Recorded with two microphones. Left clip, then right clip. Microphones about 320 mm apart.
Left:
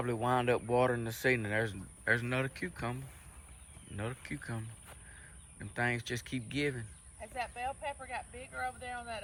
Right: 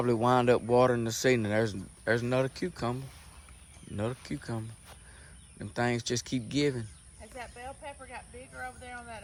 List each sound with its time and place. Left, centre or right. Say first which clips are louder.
0.0 s speech: right 6 dB; centre
7.2 s speech: left 5 dB; left